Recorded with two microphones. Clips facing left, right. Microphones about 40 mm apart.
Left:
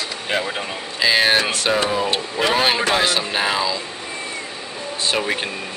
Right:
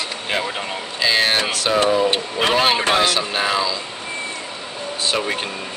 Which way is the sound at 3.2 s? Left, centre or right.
Centre.